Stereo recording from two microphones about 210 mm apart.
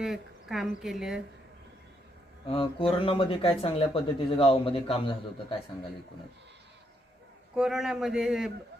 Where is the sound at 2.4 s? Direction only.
25° left (ahead or behind).